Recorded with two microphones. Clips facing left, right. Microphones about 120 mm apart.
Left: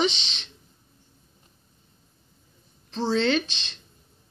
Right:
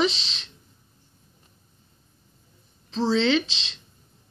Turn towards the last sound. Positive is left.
turn(degrees=-90)